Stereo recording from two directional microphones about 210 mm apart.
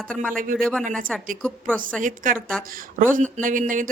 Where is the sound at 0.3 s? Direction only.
40° right (ahead or behind).